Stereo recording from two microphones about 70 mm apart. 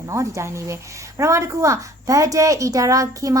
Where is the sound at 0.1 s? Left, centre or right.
Right.